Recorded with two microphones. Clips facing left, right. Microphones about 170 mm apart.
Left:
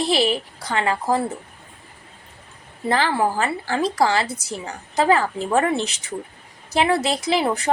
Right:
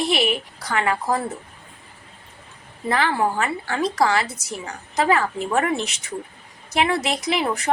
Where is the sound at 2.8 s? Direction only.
30° left (ahead or behind).